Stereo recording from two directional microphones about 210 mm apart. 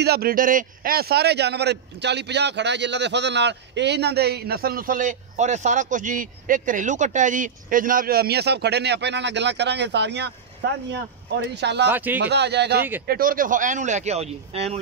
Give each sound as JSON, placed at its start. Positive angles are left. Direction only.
{"t": 0.0, "sound": "a man's voice", "side_deg": -50}
{"t": 11.9, "sound": "speech", "side_deg": -10}
{"t": 12.2, "sound": "a man's voice", "side_deg": -55}